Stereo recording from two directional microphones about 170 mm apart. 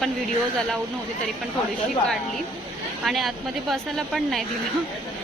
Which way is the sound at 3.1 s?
Centre (ahead or behind).